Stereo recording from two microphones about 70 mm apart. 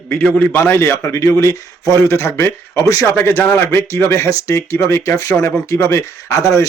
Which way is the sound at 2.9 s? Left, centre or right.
Left.